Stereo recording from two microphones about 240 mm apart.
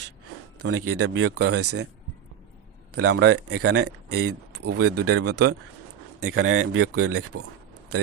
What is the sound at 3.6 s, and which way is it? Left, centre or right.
Speech, right.